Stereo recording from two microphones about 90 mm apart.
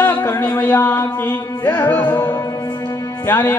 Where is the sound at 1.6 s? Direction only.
25° left (ahead or behind).